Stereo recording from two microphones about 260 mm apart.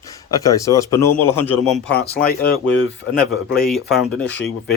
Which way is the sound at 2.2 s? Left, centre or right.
Left.